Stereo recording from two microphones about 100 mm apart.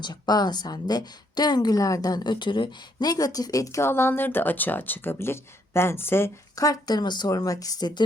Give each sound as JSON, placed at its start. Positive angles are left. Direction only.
{"t": 0.0, "sound": "a woman's voice", "side_deg": 45}